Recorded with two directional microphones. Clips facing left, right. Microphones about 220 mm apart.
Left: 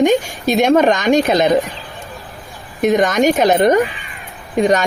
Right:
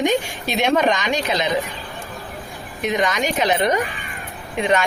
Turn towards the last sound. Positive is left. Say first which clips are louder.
# left 5 dB
turn(degrees=40)  # may be behind; listen again after turning